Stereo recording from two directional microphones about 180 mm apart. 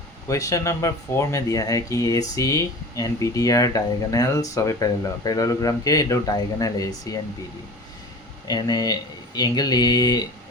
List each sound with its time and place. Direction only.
0.3 s speech: 20° left (ahead or behind)
8.4 s speech: 20° left (ahead or behind)